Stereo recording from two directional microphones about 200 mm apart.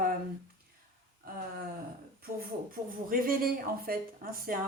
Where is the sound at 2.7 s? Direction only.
45° right (ahead or behind).